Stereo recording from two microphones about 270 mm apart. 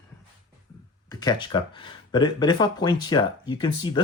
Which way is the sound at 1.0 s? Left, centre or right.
Centre.